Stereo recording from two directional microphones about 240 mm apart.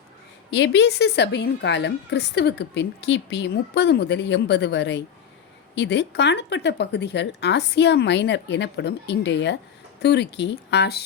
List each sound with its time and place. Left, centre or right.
0.5 s a woman's voice: left